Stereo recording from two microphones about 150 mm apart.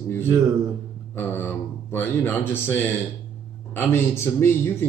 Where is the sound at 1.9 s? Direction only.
15° left (ahead or behind).